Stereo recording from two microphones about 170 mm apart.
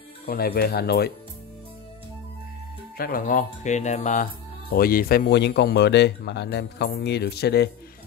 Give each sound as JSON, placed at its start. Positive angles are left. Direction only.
{"t": 0.3, "sound": "speech", "side_deg": 65}
{"t": 3.0, "sound": "speech", "side_deg": 55}